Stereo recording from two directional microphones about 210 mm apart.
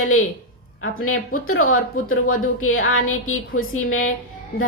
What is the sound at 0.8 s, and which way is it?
A woman's voice, 85° left.